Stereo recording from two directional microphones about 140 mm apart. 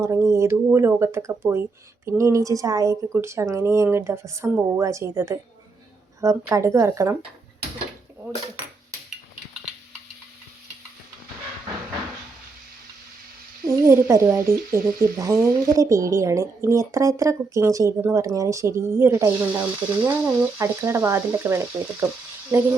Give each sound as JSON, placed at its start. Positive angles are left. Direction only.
{"t": 0.0, "sound": "speech", "side_deg": -20}
{"t": 13.7, "sound": "speech", "side_deg": -20}
{"t": 14.4, "sound": "a sound", "side_deg": -90}
{"t": 15.1, "sound": "speech", "side_deg": -25}